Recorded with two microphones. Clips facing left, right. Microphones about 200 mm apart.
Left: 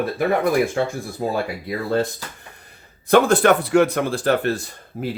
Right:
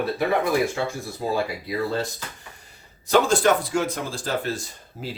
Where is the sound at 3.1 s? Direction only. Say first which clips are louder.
Left 4 dB; 60° left (ahead or behind).